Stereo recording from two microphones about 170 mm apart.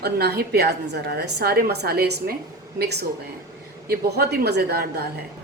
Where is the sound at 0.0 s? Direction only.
70° right (ahead or behind).